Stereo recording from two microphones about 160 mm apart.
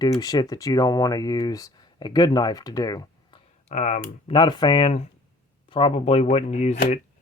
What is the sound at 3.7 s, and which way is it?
Speech, 50° left (ahead or behind).